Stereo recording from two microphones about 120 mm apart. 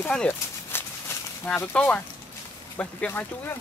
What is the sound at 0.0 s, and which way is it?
Speech, 10° left (ahead or behind).